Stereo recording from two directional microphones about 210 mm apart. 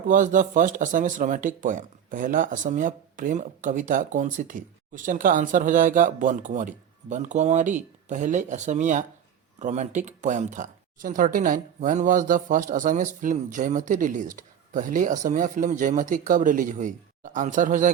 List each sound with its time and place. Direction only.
0.1 s speech: 40° right (ahead or behind)